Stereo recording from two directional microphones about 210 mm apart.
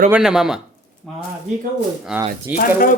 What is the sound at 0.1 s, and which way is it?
Speech, 5° right (ahead or behind).